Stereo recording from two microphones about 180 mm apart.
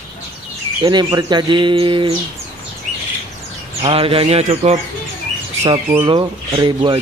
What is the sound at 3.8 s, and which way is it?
Speech, 30° right (ahead or behind).